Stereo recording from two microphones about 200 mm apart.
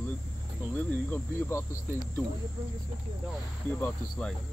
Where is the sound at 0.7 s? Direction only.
10° left (ahead or behind).